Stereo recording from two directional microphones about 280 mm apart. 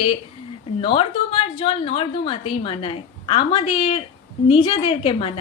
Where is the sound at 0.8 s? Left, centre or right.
Centre.